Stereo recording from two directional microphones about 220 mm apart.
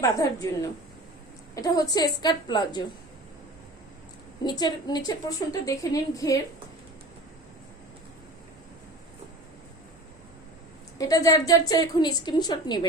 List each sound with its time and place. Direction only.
0.0 s a woman's voice: 15° left (ahead or behind)
4.4 s a woman's voice: 20° left (ahead or behind)
10.9 s a woman's voice: 15° left (ahead or behind)